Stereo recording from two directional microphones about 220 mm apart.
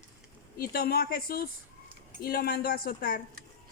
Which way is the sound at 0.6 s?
45° left (ahead or behind).